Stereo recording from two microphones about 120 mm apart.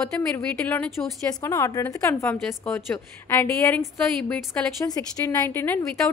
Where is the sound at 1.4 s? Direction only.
25° left (ahead or behind).